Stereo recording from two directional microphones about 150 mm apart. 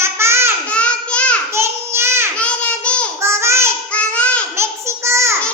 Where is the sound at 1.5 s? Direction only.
15° right (ahead or behind).